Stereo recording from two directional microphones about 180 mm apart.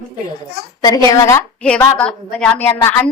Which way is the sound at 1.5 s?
5° left (ahead or behind).